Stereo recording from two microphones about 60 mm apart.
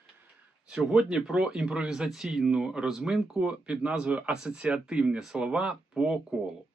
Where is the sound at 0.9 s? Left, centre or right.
Centre.